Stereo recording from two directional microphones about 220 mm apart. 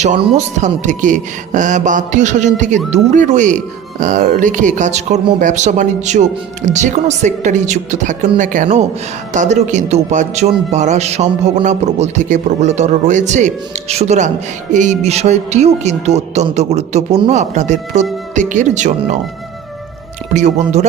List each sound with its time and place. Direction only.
0.0 s speech: 30° right (ahead or behind)
20.3 s speech: 30° right (ahead or behind)